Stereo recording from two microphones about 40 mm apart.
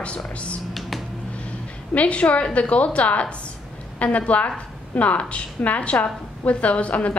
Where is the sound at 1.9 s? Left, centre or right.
Left.